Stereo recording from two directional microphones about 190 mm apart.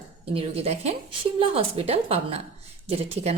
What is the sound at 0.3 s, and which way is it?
A woman's voice, 30° right (ahead or behind).